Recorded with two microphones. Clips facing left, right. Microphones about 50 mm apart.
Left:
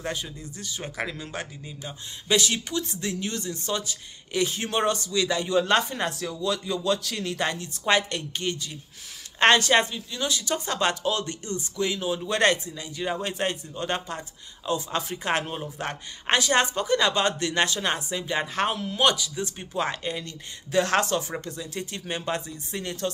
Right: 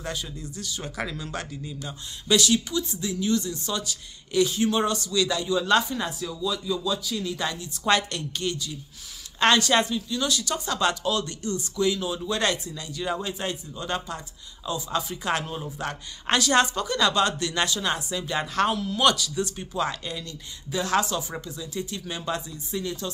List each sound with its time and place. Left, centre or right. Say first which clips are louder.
0.0 s speech: left 1 dB; left
6.0 s speech: left 1 dB; left
7.8 s speech: even; left
12.7 s speech: even; left
13.2 s speech: left 2 dB; left
20.7 s speech: left 2 dB; left